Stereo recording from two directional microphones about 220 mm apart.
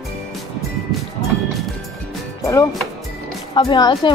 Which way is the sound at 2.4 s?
15° left (ahead or behind).